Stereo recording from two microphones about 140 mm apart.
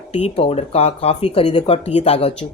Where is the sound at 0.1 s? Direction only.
50° left (ahead or behind).